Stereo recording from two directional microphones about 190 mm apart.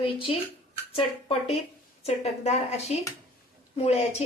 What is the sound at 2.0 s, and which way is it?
A woman's voice, 35° left (ahead or behind).